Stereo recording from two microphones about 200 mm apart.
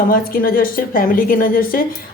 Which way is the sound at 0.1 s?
45° left (ahead or behind).